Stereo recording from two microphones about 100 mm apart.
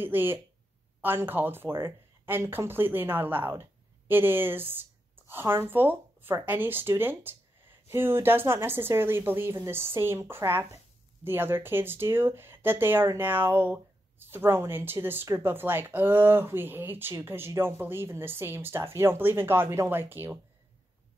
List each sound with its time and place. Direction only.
0.0 s speech: 20° right (ahead or behind)